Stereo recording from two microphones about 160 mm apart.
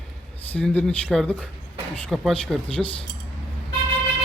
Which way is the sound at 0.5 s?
10° left (ahead or behind).